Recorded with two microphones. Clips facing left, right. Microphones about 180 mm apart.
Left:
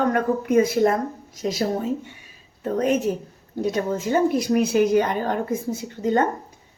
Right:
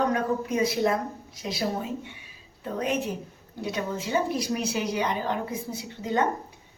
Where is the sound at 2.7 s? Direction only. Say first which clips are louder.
Left 7 dB; 45° left (ahead or behind).